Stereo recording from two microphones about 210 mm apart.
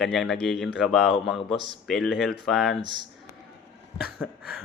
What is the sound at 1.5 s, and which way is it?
Speech, 25° left (ahead or behind).